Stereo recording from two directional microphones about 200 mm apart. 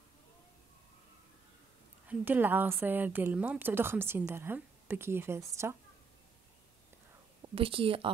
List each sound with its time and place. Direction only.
2.0 s a woman's voice: 10° right (ahead or behind)
7.4 s speech: 25° right (ahead or behind)